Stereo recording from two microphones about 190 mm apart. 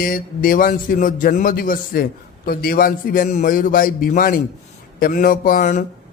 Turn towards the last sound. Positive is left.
turn(degrees=40)  # may be behind; listen again after turning